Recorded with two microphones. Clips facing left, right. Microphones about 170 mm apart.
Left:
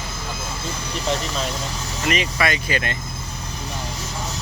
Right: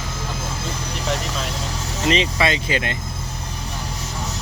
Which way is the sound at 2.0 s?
25° right (ahead or behind).